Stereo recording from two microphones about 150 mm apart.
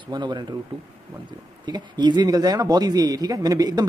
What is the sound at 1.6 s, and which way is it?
Speech, 30° right (ahead or behind).